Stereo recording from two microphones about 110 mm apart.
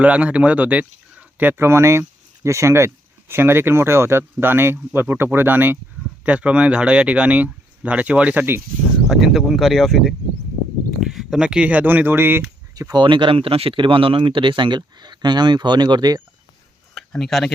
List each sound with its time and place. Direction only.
0.0 s speech: 10° right (ahead or behind)
9.0 s speech: centre (ahead or behind); by 12.5 s 20° right (ahead or behind)
12.7 s speech: 35° right (ahead or behind)
16.9 s a sound: 5° left (ahead or behind)